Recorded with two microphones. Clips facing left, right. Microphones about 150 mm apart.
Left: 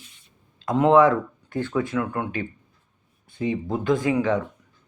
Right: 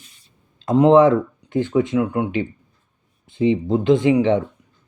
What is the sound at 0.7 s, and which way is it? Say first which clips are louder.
Speech: right 4 dB; 25° right (ahead or behind).